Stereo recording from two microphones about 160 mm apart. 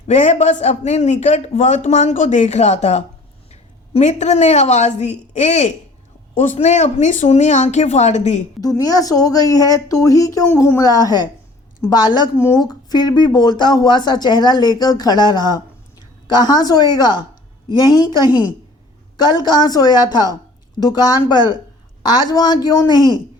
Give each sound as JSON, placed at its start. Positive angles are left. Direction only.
{"t": 0.1, "sound": "a man's voice", "side_deg": 45}
{"t": 8.6, "sound": "speech", "side_deg": 20}